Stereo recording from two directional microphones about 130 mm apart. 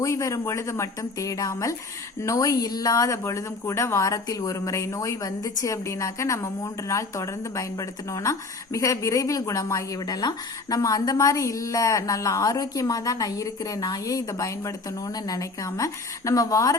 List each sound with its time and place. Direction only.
0.0 s speech: 25° left (ahead or behind)